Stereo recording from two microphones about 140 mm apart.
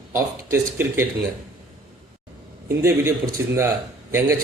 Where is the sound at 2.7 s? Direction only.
20° right (ahead or behind).